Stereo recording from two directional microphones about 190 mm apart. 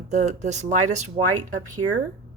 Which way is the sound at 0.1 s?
40° right (ahead or behind).